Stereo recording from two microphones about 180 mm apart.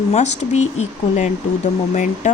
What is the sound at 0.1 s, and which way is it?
A woman's voice, 40° left (ahead or behind).